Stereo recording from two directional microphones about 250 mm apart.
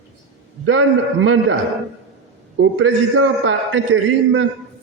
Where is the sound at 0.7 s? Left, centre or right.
Right.